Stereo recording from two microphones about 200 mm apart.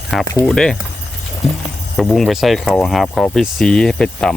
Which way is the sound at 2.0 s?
Centre (ahead or behind).